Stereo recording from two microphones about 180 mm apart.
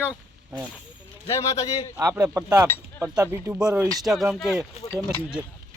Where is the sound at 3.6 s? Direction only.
5° right (ahead or behind).